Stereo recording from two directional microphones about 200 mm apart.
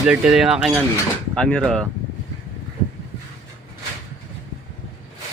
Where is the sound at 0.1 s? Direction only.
5° right (ahead or behind).